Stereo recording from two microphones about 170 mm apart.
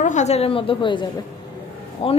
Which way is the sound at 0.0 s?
45° left (ahead or behind).